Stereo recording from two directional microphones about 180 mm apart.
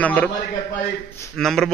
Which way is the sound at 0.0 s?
10° left (ahead or behind).